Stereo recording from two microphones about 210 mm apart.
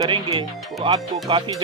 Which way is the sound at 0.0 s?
25° right (ahead or behind).